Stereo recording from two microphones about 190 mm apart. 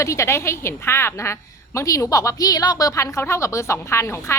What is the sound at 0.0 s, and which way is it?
A woman's voice, 15° left (ahead or behind).